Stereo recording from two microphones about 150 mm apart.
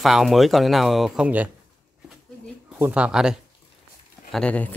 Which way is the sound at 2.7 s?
10° right (ahead or behind).